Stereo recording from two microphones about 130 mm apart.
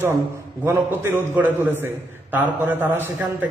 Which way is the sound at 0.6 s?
15° right (ahead or behind).